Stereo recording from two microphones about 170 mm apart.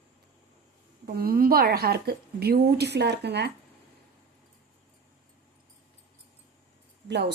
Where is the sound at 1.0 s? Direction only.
65° right (ahead or behind); by 3.5 s 80° right.